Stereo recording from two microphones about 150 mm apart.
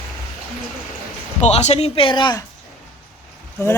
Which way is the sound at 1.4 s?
45° left (ahead or behind).